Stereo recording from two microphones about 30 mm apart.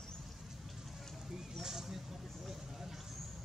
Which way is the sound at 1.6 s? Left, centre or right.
Centre.